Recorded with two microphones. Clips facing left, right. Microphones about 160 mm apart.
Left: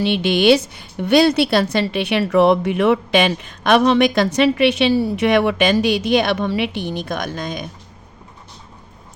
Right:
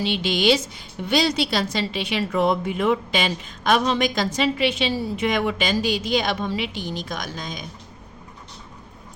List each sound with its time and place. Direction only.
0.0 s a woman's voice: 60° left (ahead or behind)